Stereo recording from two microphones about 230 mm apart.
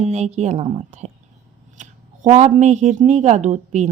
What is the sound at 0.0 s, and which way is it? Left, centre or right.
A woman's voice, right.